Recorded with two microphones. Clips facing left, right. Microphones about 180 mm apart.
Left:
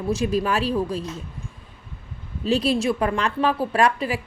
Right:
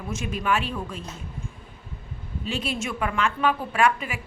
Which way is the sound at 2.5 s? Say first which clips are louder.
Left 9 dB; 35° left (ahead or behind).